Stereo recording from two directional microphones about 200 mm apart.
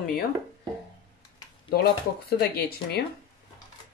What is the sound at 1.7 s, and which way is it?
Speech, 50° left (ahead or behind).